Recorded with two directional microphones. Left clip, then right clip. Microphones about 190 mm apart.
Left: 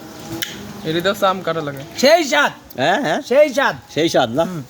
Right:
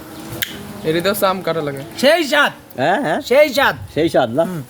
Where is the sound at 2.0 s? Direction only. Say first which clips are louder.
Even; 45° left (ahead or behind).